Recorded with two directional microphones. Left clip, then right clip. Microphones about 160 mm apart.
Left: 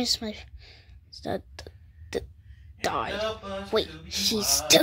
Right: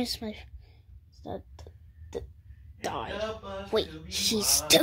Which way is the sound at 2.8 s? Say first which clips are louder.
Left 6 dB; 20° left (ahead or behind).